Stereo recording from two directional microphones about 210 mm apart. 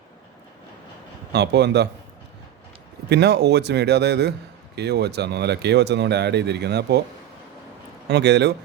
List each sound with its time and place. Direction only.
1.3 s a man's voice: 55° right (ahead or behind)
3.1 s a man's voice: 55° right (ahead or behind)
8.0 s a man's voice: 55° right (ahead or behind)